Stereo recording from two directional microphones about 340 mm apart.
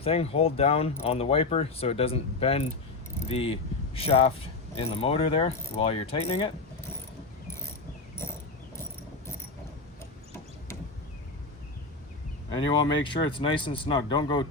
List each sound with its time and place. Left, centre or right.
0.0 s speech: centre
12.5 s speech: centre